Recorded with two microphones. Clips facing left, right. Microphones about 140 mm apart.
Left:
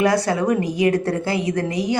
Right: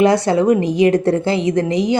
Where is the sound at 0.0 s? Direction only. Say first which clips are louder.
Right 5 dB; 25° right (ahead or behind).